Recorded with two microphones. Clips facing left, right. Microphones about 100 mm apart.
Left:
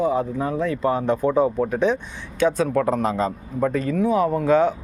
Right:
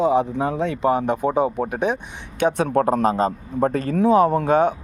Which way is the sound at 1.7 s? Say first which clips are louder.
Left 2 dB; 55° right (ahead or behind).